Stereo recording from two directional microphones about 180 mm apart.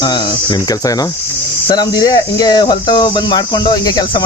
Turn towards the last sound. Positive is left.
turn(degrees=25)  # may be behind; listen again after turning